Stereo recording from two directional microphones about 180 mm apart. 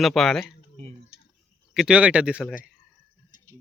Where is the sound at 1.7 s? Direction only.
5° right (ahead or behind).